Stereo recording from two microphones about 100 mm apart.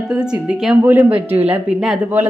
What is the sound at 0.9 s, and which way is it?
Speech, 20° right (ahead or behind).